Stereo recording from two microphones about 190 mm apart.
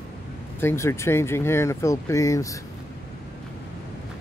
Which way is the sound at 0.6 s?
15° left (ahead or behind).